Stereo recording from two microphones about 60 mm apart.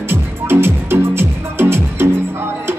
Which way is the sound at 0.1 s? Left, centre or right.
Right.